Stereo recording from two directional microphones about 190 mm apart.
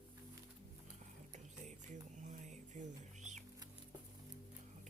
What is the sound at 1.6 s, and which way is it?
Bird, 40° right (ahead or behind).